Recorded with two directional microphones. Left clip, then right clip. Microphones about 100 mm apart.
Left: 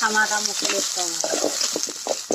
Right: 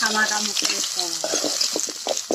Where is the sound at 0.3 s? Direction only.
35° left (ahead or behind).